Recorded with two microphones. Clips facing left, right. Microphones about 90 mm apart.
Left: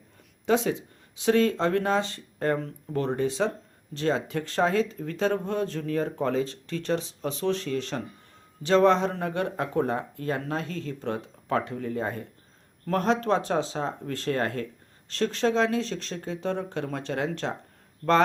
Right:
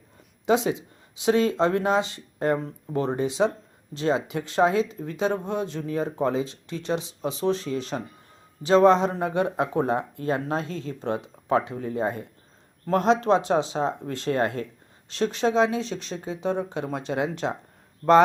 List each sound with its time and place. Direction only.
0.4 s speech: 20° right (ahead or behind)
7.4 s speech: 25° right (ahead or behind)
7.7 s speech: 15° right (ahead or behind)